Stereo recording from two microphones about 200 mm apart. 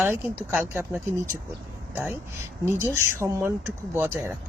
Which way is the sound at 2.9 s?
15° right (ahead or behind).